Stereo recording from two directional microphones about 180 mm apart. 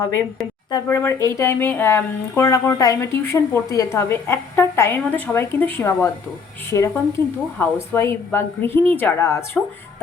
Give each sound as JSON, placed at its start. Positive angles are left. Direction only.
{"t": 0.7, "sound": "speech", "side_deg": 15}